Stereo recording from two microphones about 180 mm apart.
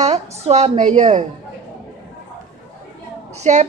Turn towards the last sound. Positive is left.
turn(degrees=-40)  # may be behind; listen again after turning